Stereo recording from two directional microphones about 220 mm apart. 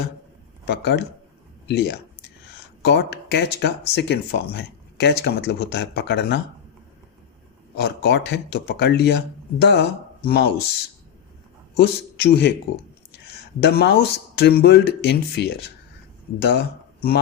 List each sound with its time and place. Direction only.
0.6 s speech: 50° left (ahead or behind)
7.8 s speech: 50° left (ahead or behind)
11.8 s speech: 50° left (ahead or behind)